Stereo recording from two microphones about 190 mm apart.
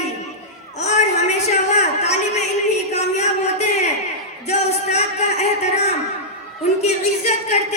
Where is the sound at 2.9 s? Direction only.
35° left (ahead or behind).